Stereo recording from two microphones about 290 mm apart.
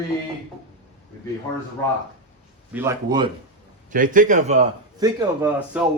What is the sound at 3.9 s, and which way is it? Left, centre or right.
A man's voice, right.